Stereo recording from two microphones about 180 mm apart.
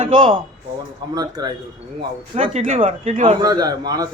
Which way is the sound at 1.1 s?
20° right (ahead or behind).